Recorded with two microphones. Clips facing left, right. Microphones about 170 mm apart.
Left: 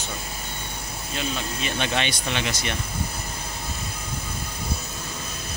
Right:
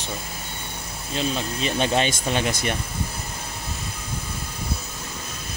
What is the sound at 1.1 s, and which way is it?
Speech, 35° right (ahead or behind).